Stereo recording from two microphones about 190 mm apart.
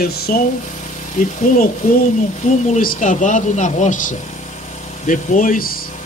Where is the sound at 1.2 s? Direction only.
45° left (ahead or behind).